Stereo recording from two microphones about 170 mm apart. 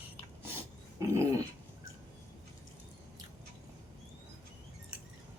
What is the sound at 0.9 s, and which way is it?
Dog, 15° right (ahead or behind).